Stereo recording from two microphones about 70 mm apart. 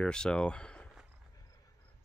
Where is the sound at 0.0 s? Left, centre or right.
Centre.